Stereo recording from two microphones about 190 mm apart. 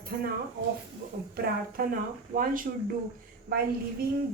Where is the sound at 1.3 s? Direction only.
50° right (ahead or behind).